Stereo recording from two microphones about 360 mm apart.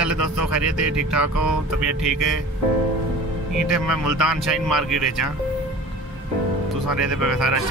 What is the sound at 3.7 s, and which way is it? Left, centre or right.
Speech, centre.